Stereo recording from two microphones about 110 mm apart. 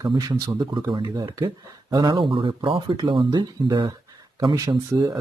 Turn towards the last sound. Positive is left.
turn(degrees=-40)  # may be behind; listen again after turning